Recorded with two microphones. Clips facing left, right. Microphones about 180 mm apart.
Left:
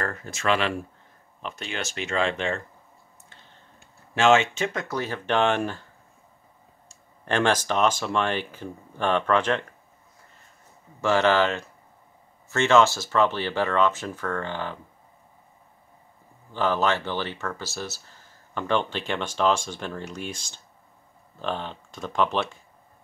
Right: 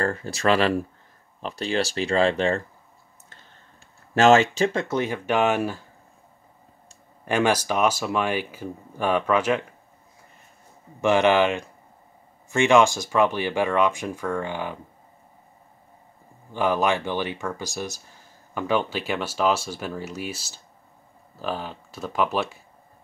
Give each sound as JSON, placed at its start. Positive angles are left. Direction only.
{"t": 0.0, "sound": "speech", "side_deg": -30}
{"t": 4.1, "sound": "speech", "side_deg": -40}
{"t": 7.2, "sound": "speech", "side_deg": -10}
{"t": 11.0, "sound": "speech", "side_deg": -15}
{"t": 16.5, "sound": "speech", "side_deg": -15}